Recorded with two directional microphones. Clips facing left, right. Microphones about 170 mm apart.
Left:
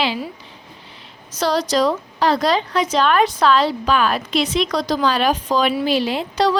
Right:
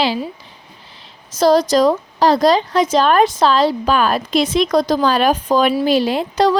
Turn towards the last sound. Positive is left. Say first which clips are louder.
# right 3 dB
turn(degrees=-45)  # may be behind; listen again after turning